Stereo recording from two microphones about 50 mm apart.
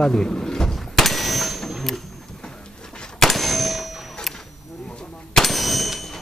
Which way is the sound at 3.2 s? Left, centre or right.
Centre.